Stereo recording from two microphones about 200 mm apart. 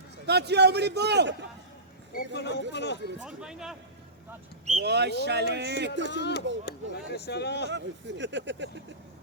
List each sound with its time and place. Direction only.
0.3 s a man's voice: 55° right (ahead or behind)
2.1 s speech: 60° left (ahead or behind)
3.2 s speech: 5° right (ahead or behind)
4.8 s a man's voice: 55° right (ahead or behind)
6.1 s speech: 60° left (ahead or behind)
7.7 s a man's voice: 60° right (ahead or behind)